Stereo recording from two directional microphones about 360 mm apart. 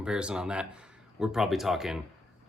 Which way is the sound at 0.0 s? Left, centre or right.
Centre.